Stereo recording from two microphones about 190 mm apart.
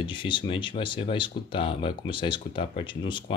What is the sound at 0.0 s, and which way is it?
Speech, 25° left (ahead or behind).